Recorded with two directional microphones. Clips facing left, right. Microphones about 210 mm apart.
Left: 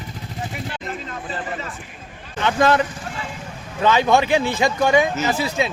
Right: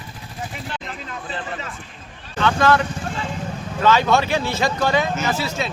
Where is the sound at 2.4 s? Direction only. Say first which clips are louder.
Even; 20° left (ahead or behind).